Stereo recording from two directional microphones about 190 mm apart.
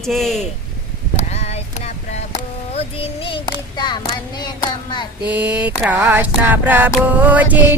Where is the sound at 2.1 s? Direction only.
35° left (ahead or behind).